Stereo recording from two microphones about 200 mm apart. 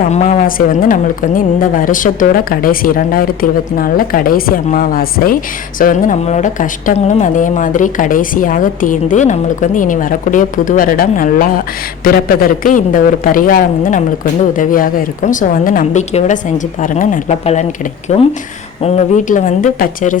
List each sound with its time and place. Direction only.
0.0 s a woman's voice: 35° left (ahead or behind)